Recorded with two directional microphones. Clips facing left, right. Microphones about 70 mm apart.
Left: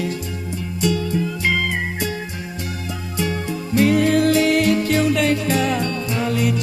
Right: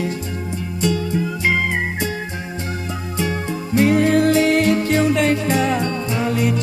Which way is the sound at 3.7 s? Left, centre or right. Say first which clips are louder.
Right 1 dB; right.